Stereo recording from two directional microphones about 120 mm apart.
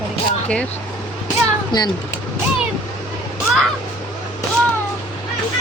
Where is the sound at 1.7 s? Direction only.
35° left (ahead or behind).